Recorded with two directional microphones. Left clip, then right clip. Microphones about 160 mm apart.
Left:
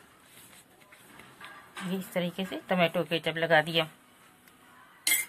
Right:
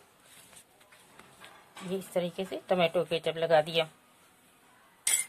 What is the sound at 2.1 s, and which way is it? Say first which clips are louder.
Speech: right 1 dB; 50° right (ahead or behind).